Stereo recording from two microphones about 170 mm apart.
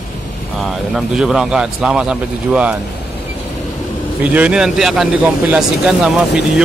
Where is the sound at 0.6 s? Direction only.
Centre (ahead or behind).